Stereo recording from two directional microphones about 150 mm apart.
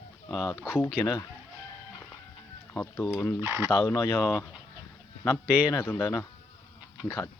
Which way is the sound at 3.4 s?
15° right (ahead or behind).